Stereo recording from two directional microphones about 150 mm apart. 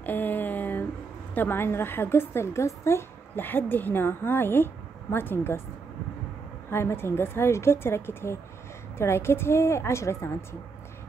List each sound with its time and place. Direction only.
0.0 s a sound: 10° left (ahead or behind)
1.3 s a woman's voice: 15° left (ahead or behind)
6.7 s a woman's voice: 15° left (ahead or behind)